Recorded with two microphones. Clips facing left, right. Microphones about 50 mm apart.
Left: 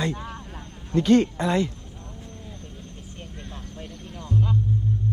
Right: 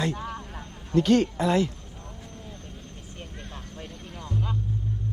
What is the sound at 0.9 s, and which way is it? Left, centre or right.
Speech, left.